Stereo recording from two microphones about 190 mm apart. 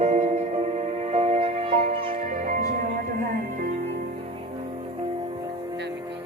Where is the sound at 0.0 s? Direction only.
35° right (ahead or behind).